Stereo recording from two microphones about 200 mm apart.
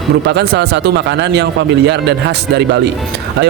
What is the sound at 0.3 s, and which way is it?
A man's voice, 55° right (ahead or behind).